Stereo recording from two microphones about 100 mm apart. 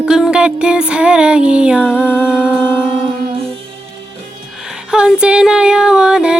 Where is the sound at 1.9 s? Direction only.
20° left (ahead or behind).